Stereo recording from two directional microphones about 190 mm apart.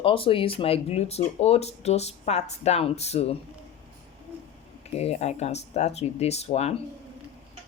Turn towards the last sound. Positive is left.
turn(degrees=35)  # may be behind; listen again after turning